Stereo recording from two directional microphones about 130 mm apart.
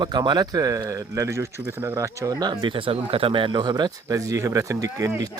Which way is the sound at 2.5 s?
40° right (ahead or behind).